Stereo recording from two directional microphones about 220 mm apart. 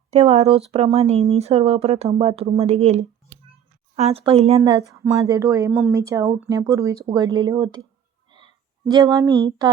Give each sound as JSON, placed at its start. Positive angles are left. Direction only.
{"t": 0.1, "sound": "speech", "side_deg": -30}
{"t": 8.9, "sound": "speech", "side_deg": -15}